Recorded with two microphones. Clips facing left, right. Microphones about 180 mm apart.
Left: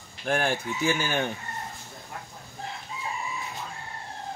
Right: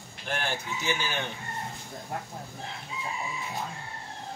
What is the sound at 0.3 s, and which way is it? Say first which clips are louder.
Speech: left 6 dB; 50° left (ahead or behind).